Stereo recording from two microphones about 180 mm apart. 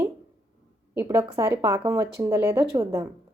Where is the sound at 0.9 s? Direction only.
15° right (ahead or behind).